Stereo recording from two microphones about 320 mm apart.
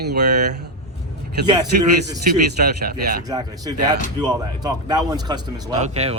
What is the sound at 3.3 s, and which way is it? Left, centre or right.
Speech, centre.